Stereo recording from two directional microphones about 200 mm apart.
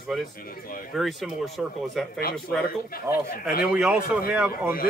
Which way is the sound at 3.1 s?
15° right (ahead or behind).